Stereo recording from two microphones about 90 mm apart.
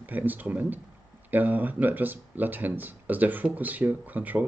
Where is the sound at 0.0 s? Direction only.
20° right (ahead or behind).